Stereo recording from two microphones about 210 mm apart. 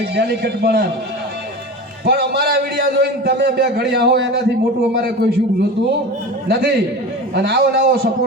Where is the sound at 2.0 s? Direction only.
50° right (ahead or behind).